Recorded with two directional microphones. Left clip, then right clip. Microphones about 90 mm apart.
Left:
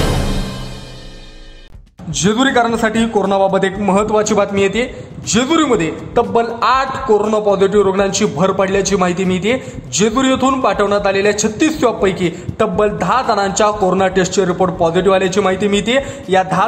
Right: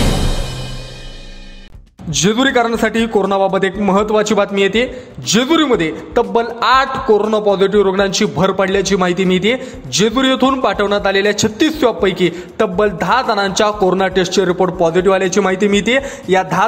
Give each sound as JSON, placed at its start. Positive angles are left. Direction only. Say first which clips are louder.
{"t": 2.0, "sound": "a man's voice", "louder": "right 1 dB", "side_deg": -25}
{"t": 16.3, "sound": "a man's voice", "louder": "even", "side_deg": -25}